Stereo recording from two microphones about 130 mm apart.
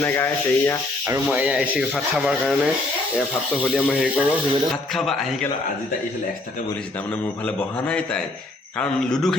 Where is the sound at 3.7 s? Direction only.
10° left (ahead or behind).